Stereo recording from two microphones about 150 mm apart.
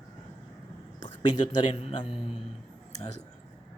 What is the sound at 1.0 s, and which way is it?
Speech, 30° left (ahead or behind).